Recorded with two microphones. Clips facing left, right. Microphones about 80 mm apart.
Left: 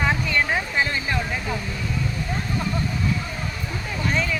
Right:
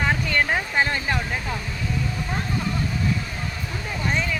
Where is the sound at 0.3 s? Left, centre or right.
Right.